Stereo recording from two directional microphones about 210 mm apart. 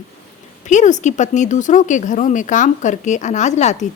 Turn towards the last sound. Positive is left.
turn(degrees=35)  # may be behind; listen again after turning